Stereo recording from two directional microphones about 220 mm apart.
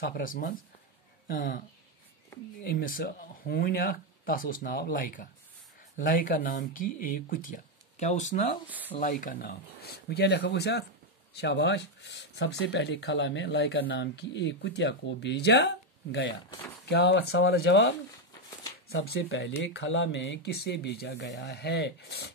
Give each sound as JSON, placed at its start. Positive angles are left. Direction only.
{"t": 0.0, "sound": "speech", "side_deg": 40}
{"t": 2.6, "sound": "speech", "side_deg": 40}
{"t": 8.6, "sound": "speech", "side_deg": -5}
{"t": 8.9, "sound": "speech", "side_deg": 35}
{"t": 16.3, "sound": "speech", "side_deg": 20}
{"t": 16.9, "sound": "speech", "side_deg": 50}